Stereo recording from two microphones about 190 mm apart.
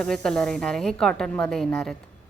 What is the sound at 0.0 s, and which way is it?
A woman's voice, 5° left (ahead or behind).